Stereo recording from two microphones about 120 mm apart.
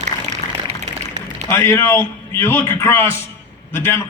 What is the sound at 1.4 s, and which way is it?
A man's voice, 20° left (ahead or behind).